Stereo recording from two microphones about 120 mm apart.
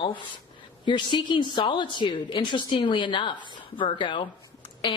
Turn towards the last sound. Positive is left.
turn(degrees=40)  # may be behind; listen again after turning